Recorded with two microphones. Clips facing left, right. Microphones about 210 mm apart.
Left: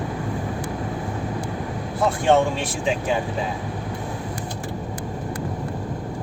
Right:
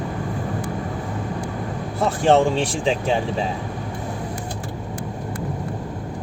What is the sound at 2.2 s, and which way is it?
Speech, 30° right (ahead or behind).